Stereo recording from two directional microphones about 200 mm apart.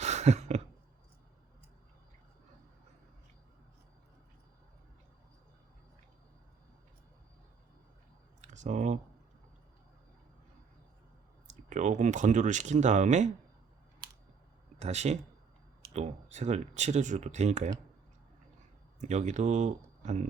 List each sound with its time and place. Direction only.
0.0 s a sound: 35° right (ahead or behind)
8.4 s clicking: 35° right (ahead or behind)
11.4 s speech: 40° right (ahead or behind)
14.8 s speech: 35° right (ahead or behind)
18.9 s speech: 35° right (ahead or behind)